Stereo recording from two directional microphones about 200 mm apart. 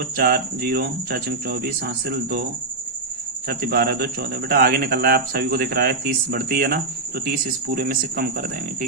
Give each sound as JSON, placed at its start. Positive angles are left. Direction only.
{"t": 0.2, "sound": "speech", "side_deg": -50}
{"t": 3.4, "sound": "speech", "side_deg": -50}